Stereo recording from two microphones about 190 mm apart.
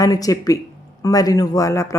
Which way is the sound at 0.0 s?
20° left (ahead or behind).